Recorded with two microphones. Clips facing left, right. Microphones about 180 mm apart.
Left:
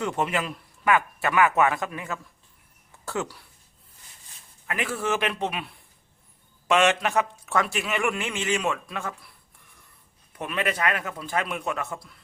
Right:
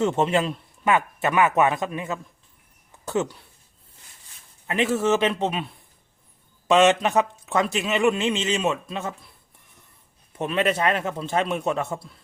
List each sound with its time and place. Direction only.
0.0 s a man's voice: 25° right (ahead or behind)
4.6 s a man's voice: 25° right (ahead or behind)
10.3 s a man's voice: 25° right (ahead or behind)